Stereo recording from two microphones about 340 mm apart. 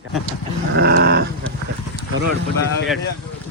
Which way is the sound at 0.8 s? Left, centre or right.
Right.